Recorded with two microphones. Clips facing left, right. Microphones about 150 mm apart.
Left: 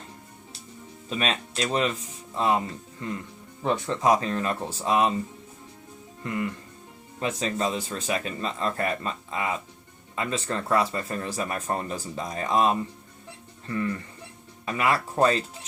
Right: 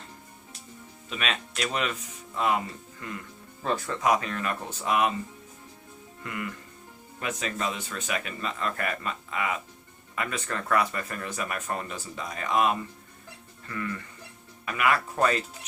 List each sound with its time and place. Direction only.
1.1 s speech: 35° left (ahead or behind)
6.2 s speech: 30° left (ahead or behind)